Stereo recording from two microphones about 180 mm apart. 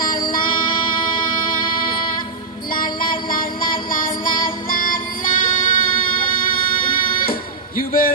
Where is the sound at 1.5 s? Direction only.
50° left (ahead or behind).